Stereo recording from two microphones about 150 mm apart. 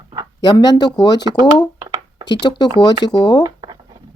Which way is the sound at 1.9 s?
30° right (ahead or behind).